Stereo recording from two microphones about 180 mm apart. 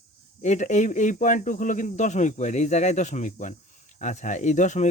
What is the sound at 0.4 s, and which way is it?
Speech, 40° left (ahead or behind).